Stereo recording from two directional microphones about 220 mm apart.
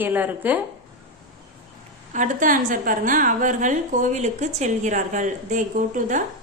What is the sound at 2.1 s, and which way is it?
A woman's voice, 35° right (ahead or behind).